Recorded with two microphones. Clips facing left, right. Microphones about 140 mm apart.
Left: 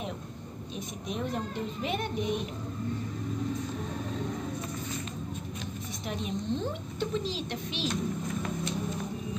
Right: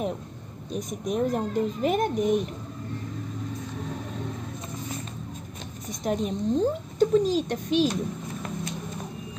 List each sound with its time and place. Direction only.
0.7 s a child's voice: 45° right (ahead or behind)
6.0 s a child's voice: 40° right (ahead or behind)